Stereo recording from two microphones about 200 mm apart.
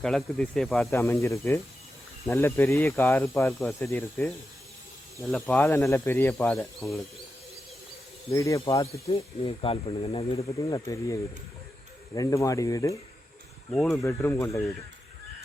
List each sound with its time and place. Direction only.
0.0 s speech: 5° left (ahead or behind)
0.9 s speech: 15° left (ahead or behind)
8.3 s speech: 15° left (ahead or behind)
9.0 s speech: 30° left (ahead or behind)
13.7 s speech: 5° left (ahead or behind)